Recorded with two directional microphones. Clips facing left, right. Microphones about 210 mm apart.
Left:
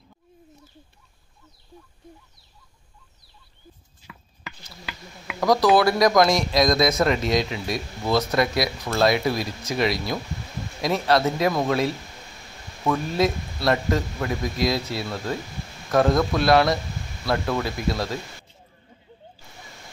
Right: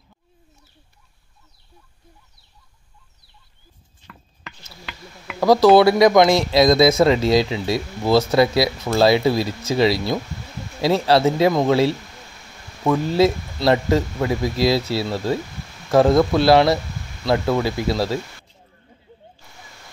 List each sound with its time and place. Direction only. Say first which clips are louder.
4.0 s chopping: even; 5° left (ahead or behind)
4.8 s speech: right 1 dB; 5° left (ahead or behind)
5.4 s speech: right 6 dB; 30° right (ahead or behind)